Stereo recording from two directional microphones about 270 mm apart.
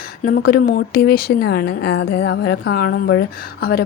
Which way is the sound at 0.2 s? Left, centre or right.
Left.